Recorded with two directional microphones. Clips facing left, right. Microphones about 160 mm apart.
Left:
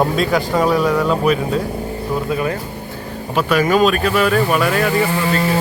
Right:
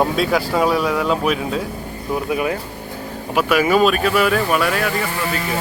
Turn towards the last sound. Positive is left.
turn(degrees=0)  # may be behind; listen again after turning